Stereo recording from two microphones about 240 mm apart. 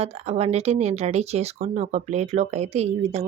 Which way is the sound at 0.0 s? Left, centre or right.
Right.